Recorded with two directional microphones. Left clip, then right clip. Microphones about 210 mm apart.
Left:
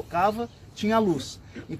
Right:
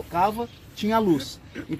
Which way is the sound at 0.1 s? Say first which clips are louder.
Right 1 dB; 5° right (ahead or behind).